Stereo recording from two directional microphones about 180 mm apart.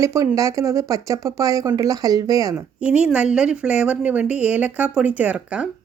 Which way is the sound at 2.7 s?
5° right (ahead or behind).